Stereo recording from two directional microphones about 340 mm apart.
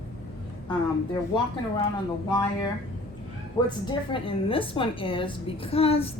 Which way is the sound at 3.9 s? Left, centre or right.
Centre.